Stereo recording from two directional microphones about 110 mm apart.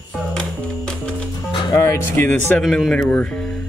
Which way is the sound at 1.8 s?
25° left (ahead or behind).